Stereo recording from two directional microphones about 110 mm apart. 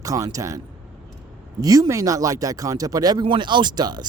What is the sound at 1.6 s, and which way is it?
Speech, 35° right (ahead or behind).